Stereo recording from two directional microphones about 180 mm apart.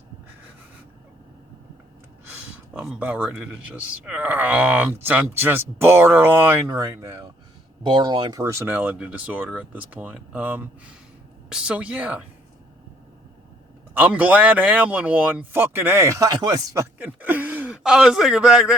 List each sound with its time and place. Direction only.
2.7 s speech: 5° right (ahead or behind)
13.9 s speech: 10° right (ahead or behind)
17.0 s speech: 10° right (ahead or behind)